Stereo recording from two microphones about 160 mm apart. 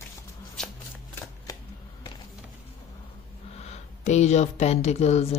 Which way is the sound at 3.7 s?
45° left (ahead or behind).